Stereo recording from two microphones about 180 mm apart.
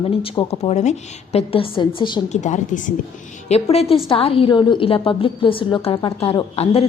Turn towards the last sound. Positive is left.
turn(degrees=35)  # may be behind; listen again after turning